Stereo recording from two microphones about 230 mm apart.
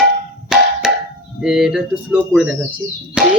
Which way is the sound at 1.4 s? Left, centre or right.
Centre.